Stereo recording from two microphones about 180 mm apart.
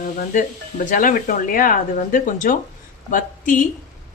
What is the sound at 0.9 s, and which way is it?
A woman's voice, 45° left (ahead or behind).